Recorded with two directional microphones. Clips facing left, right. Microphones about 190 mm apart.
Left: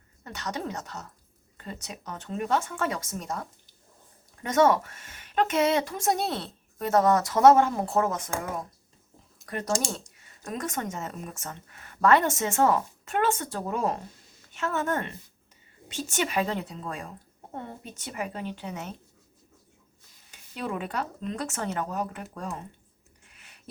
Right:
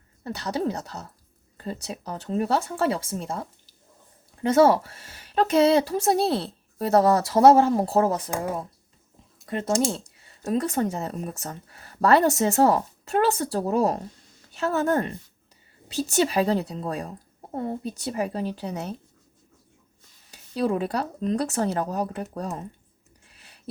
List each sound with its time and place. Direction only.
0.3 s speech: 35° right (ahead or behind)
4.4 s speech: 30° right (ahead or behind)
9.5 s speech: 25° right (ahead or behind)
20.3 s speech: 35° right (ahead or behind)
23.3 s a sound: 35° right (ahead or behind)